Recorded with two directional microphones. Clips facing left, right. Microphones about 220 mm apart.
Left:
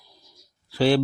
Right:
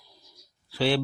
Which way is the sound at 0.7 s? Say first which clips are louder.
Left 5 dB; 40° left (ahead or behind).